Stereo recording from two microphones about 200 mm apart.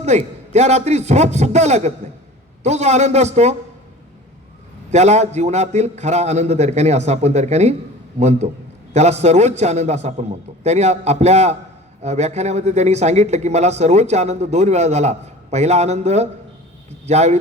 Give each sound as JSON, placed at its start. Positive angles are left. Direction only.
{"t": 0.0, "sound": "speech", "side_deg": -35}
{"t": 4.9, "sound": "speech", "side_deg": -35}